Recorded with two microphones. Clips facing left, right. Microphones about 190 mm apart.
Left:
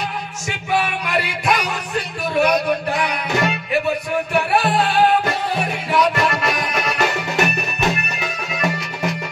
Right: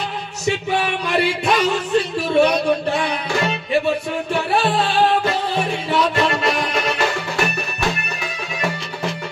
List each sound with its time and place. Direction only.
0.8 s speech: 30° right (ahead or behind)
5.9 s music: 30° right (ahead or behind)